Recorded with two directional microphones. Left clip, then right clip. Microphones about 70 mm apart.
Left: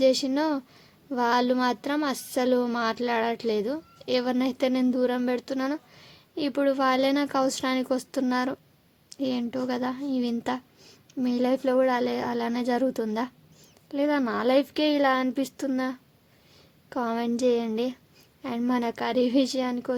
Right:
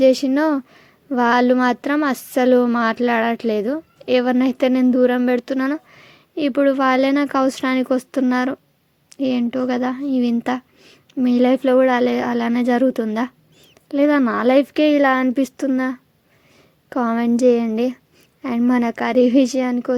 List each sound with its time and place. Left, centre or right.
0.0 s a woman's voice: right
9.0 s a sound: right
9.4 s a woman's voice: right
11.2 s a woman's voice: right
13.8 s speech: right
16.9 s speech: right
18.7 s a woman's voice: right